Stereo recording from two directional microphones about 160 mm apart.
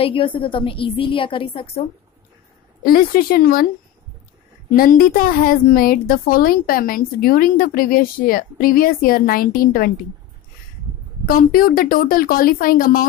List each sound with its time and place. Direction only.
0.0 s a woman's voice: 35° left (ahead or behind)
2.8 s a woman's voice: 65° left (ahead or behind)
4.7 s a woman's voice: 65° left (ahead or behind)
11.2 s a woman's voice: 65° left (ahead or behind)